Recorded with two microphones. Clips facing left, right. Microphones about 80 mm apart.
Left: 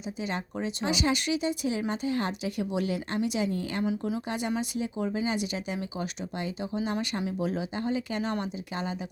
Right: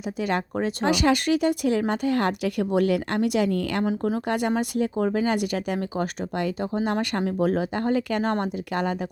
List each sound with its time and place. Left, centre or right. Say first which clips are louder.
0.2 s speech: right 8 dB; right